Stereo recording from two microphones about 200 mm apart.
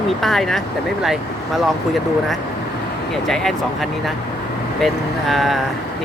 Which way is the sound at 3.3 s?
Centre (ahead or behind).